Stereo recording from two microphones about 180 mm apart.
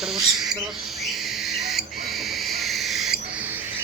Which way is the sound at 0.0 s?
Centre (ahead or behind).